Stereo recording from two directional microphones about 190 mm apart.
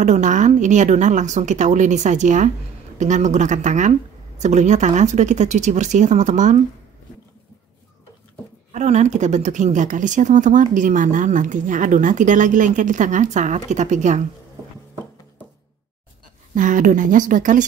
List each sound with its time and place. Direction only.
0.0 s speech: 40° right (ahead or behind)
8.7 s speech: 35° right (ahead or behind)
16.5 s speech: 45° right (ahead or behind)